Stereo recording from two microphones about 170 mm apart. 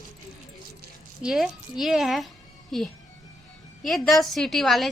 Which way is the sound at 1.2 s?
Centre (ahead or behind).